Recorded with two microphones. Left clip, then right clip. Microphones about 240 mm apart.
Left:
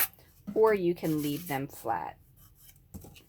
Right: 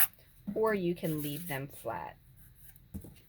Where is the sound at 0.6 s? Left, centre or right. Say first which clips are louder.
Left 6 dB; left.